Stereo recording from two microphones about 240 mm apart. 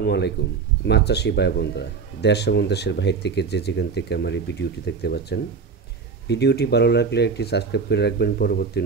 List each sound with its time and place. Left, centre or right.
0.0 s a man's voice: left